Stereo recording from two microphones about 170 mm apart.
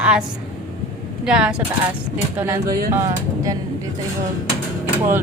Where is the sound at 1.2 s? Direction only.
5° right (ahead or behind).